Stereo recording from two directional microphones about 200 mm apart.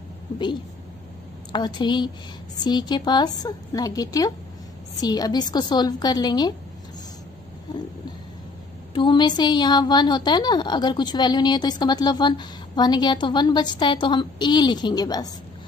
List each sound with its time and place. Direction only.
1.5 s a woman's voice: 20° left (ahead or behind)
8.9 s a woman's voice: 25° left (ahead or behind)